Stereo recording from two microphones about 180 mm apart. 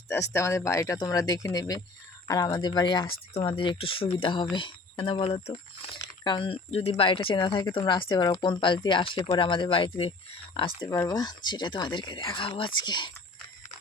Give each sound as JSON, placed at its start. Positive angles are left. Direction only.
{"t": 0.1, "sound": "speech", "side_deg": 15}
{"t": 10.8, "sound": "speech", "side_deg": 15}